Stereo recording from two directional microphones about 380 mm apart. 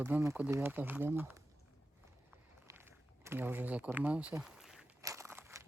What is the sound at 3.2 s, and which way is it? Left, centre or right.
Walk, centre.